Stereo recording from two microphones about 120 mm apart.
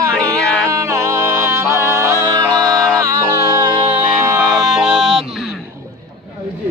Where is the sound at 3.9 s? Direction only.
15° right (ahead or behind).